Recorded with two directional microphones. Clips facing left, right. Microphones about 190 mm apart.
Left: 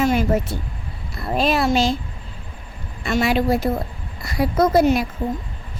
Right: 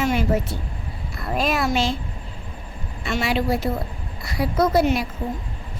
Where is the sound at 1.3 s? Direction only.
30° left (ahead or behind).